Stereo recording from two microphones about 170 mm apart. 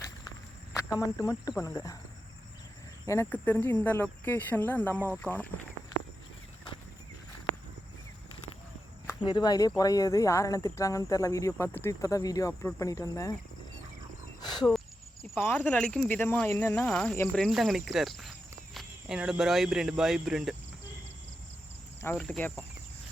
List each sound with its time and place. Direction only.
0.9 s speech: 20° left (ahead or behind)
3.1 s speech: 10° left (ahead or behind)
9.2 s speech: 25° left (ahead or behind)
15.4 s speech: 10° left (ahead or behind)
22.0 s speech: 10° left (ahead or behind)